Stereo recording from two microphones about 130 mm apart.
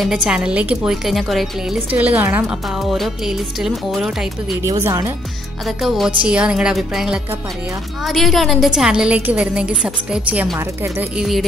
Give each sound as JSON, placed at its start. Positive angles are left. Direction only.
{"t": 0.0, "sound": "a woman's voice", "side_deg": -5}
{"t": 1.9, "sound": "a woman's voice", "side_deg": -10}
{"t": 2.9, "sound": "a woman's voice", "side_deg": -5}
{"t": 4.8, "sound": "speech", "side_deg": -20}
{"t": 5.7, "sound": "a woman's voice", "side_deg": 0}